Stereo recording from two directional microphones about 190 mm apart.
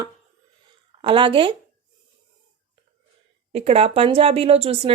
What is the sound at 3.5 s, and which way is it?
Speech, 35° right (ahead or behind).